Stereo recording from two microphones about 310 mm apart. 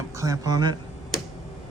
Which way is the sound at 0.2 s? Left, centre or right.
Centre.